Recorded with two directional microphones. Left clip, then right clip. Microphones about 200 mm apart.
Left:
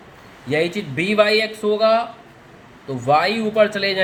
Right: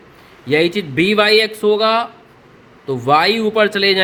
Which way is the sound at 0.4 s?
40° right (ahead or behind).